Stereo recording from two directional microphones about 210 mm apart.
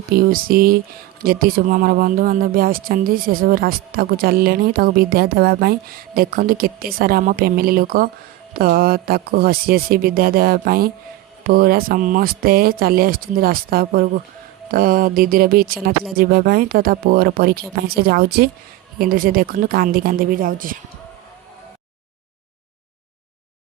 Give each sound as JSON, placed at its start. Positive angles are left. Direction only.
{"t": 0.3, "sound": "speech", "side_deg": -45}